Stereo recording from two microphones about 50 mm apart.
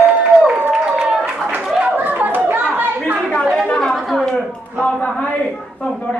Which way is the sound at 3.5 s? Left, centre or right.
Centre.